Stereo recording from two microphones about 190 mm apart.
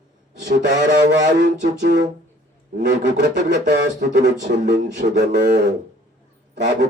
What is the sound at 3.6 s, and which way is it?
Speech, 60° right (ahead or behind).